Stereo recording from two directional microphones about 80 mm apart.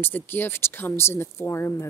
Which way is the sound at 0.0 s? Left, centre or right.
Left.